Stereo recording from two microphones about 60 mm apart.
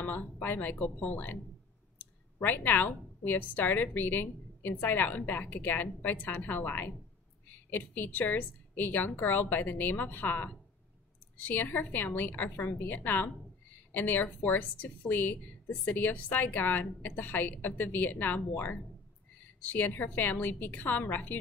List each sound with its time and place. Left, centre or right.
0.0 s a woman's voice: left
19.6 s a woman's voice: left